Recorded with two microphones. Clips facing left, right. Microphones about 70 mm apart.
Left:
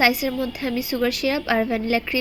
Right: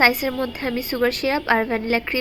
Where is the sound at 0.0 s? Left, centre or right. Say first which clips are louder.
Right 1 dB; right.